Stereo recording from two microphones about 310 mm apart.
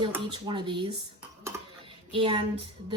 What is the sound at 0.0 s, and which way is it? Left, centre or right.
Speech, centre.